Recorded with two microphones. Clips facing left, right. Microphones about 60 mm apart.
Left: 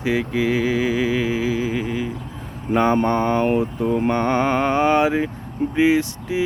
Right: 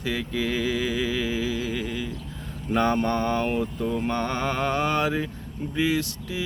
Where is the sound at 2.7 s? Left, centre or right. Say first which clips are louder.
Left 5 dB; left.